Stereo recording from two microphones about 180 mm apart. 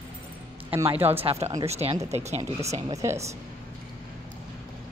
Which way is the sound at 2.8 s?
15° right (ahead or behind).